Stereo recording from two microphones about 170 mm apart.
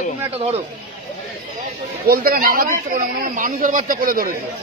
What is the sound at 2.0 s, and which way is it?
Speech, 60° right (ahead or behind).